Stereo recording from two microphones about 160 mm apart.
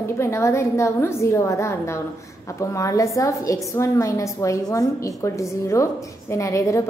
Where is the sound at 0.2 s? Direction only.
15° left (ahead or behind).